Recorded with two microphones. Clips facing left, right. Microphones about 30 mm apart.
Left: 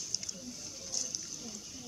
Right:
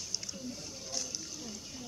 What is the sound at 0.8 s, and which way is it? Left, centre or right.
Water, centre.